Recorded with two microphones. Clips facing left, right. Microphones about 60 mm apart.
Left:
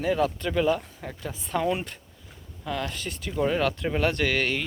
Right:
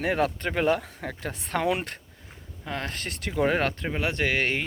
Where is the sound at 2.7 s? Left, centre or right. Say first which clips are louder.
Left 2 dB; right.